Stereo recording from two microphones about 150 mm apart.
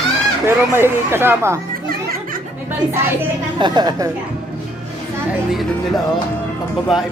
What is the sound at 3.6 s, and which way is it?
Speech, 25° right (ahead or behind).